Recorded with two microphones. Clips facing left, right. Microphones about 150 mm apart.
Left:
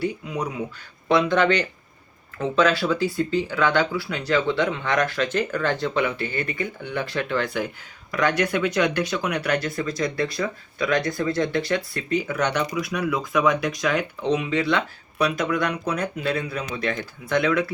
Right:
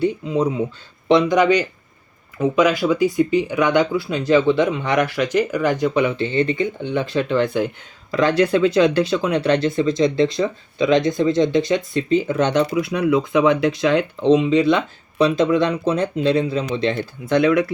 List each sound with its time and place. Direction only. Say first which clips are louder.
0.0 s speech: right 8 dB; 25° right (ahead or behind)